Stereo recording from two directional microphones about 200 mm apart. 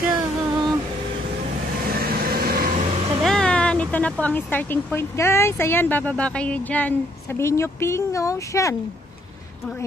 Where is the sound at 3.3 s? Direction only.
5° left (ahead or behind).